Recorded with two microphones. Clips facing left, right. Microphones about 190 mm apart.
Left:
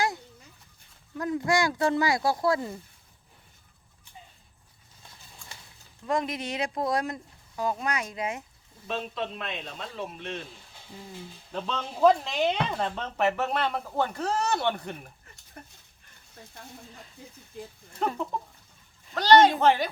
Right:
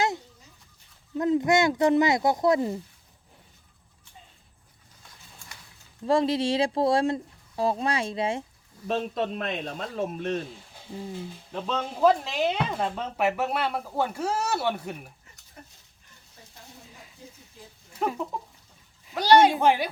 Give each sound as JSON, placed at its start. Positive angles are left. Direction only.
{"t": 1.1, "sound": "speech", "side_deg": -20}
{"t": 6.1, "sound": "speech", "side_deg": -30}
{"t": 8.9, "sound": "a man's voice", "side_deg": -45}
{"t": 11.5, "sound": "speech", "side_deg": -5}
{"t": 18.0, "sound": "speech", "side_deg": -5}